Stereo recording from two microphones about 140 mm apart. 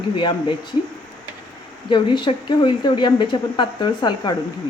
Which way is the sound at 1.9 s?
35° left (ahead or behind).